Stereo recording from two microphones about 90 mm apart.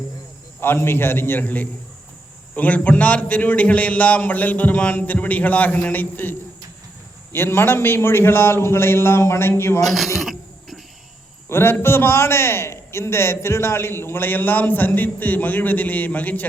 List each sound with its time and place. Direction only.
0.6 s a man's voice: 25° left (ahead or behind)
7.3 s a man's voice: 25° left (ahead or behind)
10.2 s a sound: centre (ahead or behind)
11.4 s a man's voice: 25° left (ahead or behind)